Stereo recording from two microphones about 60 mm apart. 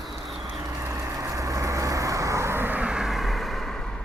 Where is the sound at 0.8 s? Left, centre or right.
Right.